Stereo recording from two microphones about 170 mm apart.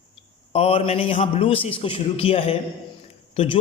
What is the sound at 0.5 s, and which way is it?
A man's voice, 35° left (ahead or behind).